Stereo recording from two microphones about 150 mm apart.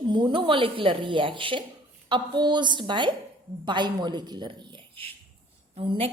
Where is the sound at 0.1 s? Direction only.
30° right (ahead or behind).